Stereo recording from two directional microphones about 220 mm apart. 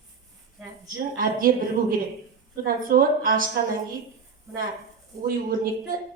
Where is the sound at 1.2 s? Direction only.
40° right (ahead or behind).